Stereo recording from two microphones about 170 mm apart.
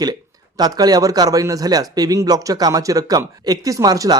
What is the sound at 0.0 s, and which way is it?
Speech, 25° right (ahead or behind).